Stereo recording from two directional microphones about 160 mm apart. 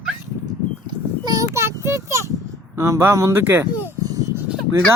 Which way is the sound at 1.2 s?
20° right (ahead or behind).